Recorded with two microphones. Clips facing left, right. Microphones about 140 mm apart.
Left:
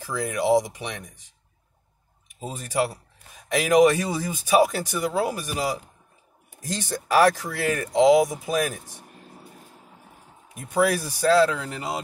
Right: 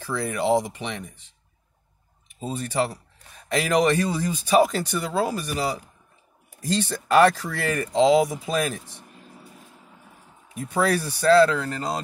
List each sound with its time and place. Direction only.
0.1 s speech: 15° left (ahead or behind)
2.4 s speech: 10° left (ahead or behind)
7.1 s speech: 10° left (ahead or behind)
10.6 s speech: 15° left (ahead or behind)